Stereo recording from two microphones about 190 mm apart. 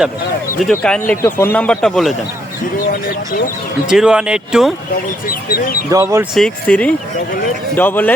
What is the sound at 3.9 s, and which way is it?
Speech, 5° right (ahead or behind).